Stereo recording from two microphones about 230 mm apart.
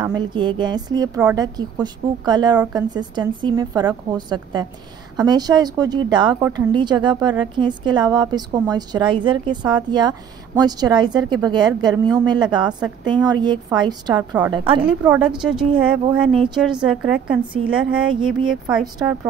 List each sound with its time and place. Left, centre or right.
0.0 s a woman's voice: centre
14.8 s a woman's voice: centre